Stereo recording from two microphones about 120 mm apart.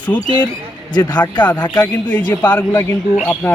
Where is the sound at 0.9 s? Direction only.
35° left (ahead or behind).